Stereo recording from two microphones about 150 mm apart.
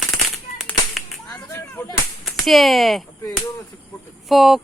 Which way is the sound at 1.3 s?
15° left (ahead or behind).